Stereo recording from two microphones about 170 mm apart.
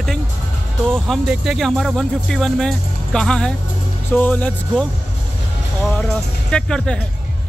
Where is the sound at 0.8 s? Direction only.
5° left (ahead or behind).